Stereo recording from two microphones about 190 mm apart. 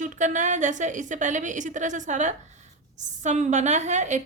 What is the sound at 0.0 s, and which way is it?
A woman's voice, 40° right (ahead or behind).